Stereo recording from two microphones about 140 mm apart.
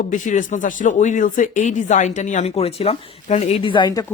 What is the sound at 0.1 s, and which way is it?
Speech, 65° left (ahead or behind).